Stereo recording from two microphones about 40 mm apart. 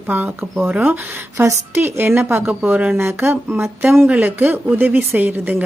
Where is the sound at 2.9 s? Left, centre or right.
Right.